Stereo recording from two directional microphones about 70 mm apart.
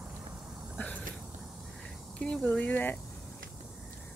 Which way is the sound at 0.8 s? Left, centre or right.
Left.